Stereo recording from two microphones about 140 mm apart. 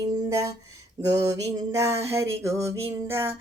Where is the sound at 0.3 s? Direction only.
20° right (ahead or behind).